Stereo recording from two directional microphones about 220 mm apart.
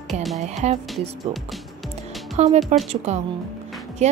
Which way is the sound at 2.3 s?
30° right (ahead or behind).